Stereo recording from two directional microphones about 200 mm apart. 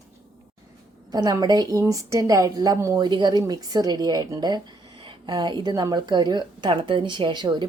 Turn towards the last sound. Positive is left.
turn(degrees=-20)  # may be behind; listen again after turning